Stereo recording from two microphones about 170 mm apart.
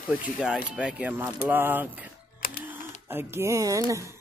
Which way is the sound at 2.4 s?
55° left (ahead or behind).